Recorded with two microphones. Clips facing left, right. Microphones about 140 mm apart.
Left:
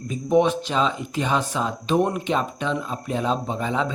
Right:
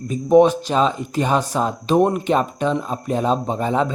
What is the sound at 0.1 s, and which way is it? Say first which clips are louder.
Speech: right 6 dB; 40° right (ahead or behind).